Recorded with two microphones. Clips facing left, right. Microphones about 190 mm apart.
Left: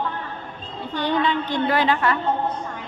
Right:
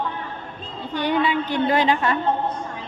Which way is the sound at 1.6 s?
20° right (ahead or behind).